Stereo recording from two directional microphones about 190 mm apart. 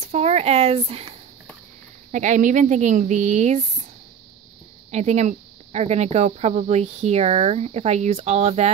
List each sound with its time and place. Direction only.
0.1 s speech: 35° right (ahead or behind)
2.1 s speech: 40° right (ahead or behind)
4.9 s speech: 35° right (ahead or behind)